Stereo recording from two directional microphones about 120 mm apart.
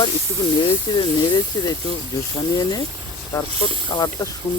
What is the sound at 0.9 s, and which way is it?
Speech, 40° left (ahead or behind).